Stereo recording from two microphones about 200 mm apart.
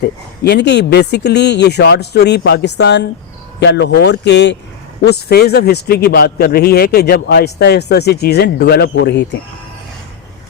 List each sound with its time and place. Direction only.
0.4 s a man's voice: 60° left (ahead or behind)